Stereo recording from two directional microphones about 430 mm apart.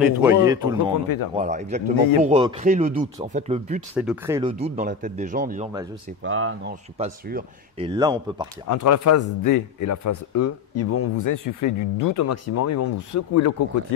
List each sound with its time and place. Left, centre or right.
0.0 s speech: centre
1.0 s speech: left
1.3 s speech: centre
3.9 s speech: centre
6.2 s speech: right
7.0 s speech: centre
8.6 s a man's voice: left